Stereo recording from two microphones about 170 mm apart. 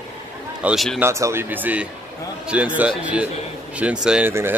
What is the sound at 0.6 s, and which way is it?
Speech, 5° right (ahead or behind).